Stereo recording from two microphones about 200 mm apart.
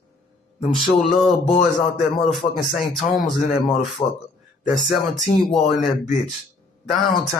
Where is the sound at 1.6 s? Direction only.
Centre (ahead or behind).